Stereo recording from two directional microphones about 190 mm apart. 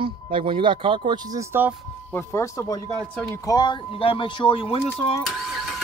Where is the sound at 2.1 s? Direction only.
15° left (ahead or behind).